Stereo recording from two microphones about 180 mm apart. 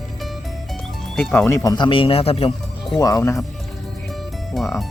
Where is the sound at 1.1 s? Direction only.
10° left (ahead or behind); by 2.9 s 35° left (ahead or behind).